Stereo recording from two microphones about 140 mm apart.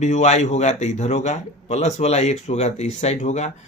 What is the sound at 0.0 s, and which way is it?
Speech, 60° left (ahead or behind).